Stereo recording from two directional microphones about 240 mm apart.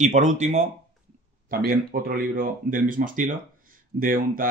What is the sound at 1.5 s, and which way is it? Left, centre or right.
Speech, right.